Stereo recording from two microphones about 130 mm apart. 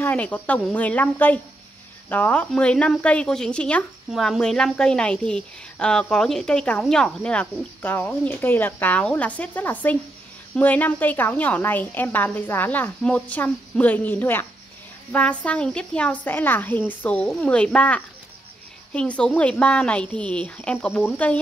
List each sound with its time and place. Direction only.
0.0 s a woman's voice: 10° left (ahead or behind)